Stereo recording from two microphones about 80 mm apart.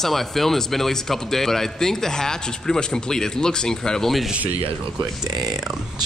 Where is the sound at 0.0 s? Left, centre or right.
Centre.